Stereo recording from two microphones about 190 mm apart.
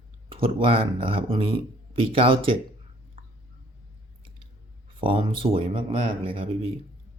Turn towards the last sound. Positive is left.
turn(degrees=-30)  # may be behind; listen again after turning